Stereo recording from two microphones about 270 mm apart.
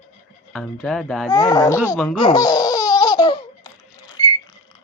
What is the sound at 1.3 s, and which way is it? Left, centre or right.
Speech, centre.